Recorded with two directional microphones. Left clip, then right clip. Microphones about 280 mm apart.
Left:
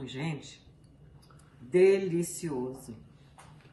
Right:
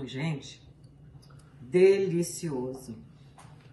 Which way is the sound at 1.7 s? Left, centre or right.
Centre.